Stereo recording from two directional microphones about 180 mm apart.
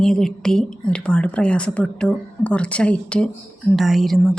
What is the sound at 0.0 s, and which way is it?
Speech, 5° left (ahead or behind).